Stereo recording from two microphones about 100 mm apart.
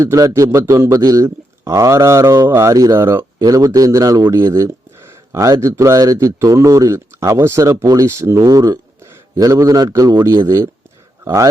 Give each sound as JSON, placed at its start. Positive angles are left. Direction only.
{"t": 0.0, "sound": "speech", "side_deg": -35}